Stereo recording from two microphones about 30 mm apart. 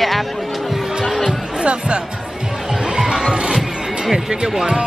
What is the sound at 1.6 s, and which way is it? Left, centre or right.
Speech, right.